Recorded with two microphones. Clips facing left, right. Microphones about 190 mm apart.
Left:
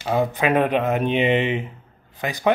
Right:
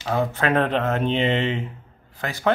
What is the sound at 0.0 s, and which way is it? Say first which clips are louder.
Speech: left 2 dB; 15° left (ahead or behind).